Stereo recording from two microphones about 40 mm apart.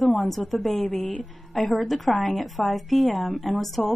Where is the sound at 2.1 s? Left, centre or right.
Centre.